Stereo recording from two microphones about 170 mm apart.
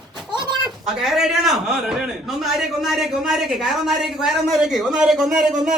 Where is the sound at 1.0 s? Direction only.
Centre (ahead or behind).